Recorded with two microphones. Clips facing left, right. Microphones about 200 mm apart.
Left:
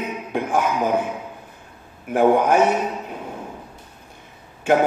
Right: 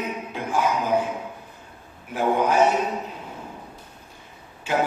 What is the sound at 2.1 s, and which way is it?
Speech, 55° left (ahead or behind).